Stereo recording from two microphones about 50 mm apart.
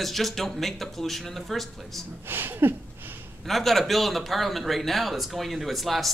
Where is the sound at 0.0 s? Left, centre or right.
Centre.